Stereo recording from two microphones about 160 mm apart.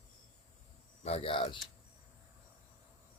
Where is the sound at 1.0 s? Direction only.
40° left (ahead or behind).